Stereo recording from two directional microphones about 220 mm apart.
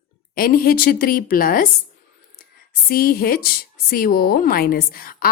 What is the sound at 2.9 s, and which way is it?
A woman's voice, 40° left (ahead or behind).